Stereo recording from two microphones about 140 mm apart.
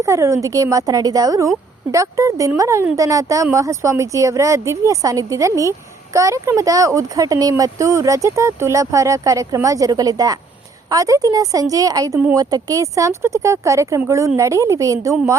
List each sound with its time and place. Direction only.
0.0 s speech: 20° right (ahead or behind)